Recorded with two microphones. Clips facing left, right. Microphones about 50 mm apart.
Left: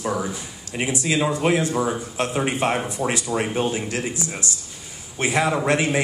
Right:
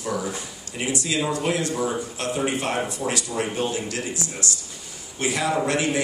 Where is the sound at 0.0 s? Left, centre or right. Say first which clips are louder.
Left 2 dB; left.